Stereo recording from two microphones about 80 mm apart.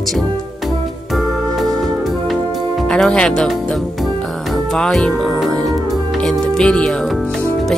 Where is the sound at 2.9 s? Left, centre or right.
Centre.